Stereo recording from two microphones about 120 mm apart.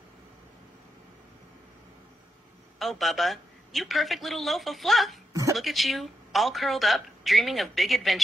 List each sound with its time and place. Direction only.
2.8 s a woman's voice: centre (ahead or behind)